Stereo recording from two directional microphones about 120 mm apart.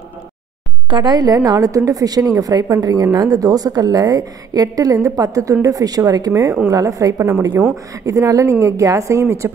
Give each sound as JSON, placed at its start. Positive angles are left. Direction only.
{"t": 0.8, "sound": "a woman's voice", "side_deg": -40}